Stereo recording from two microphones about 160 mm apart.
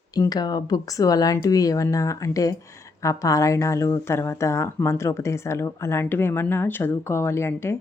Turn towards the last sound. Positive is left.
turn(degrees=15)  # may be behind; listen again after turning